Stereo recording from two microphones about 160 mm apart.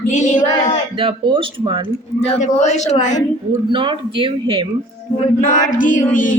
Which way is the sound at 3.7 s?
30° right (ahead or behind).